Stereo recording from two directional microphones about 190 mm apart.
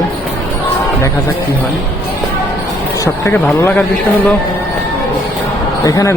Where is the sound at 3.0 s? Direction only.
15° left (ahead or behind).